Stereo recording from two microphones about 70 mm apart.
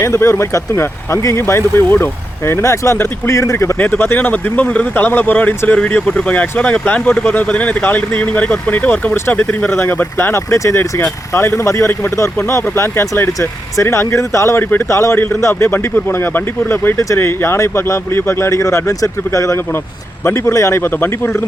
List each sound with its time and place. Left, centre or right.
0.0 s speech: left
3.8 s speech: left
9.6 s speech: left